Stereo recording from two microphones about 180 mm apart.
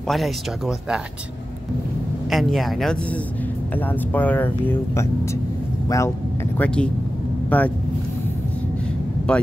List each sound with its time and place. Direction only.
0.1 s speech: centre (ahead or behind)
2.2 s speech: centre (ahead or behind); by 6.1 s 15° left (ahead or behind)
6.6 s speech: 5° left (ahead or behind)
9.3 s speech: 5° left (ahead or behind)